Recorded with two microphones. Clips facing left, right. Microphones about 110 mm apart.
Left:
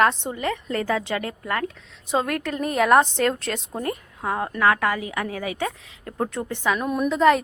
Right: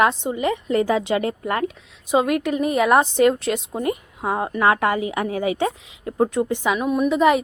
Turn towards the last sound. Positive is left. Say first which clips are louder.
# right 1 dB
turn(degrees=-10)  # may be behind; listen again after turning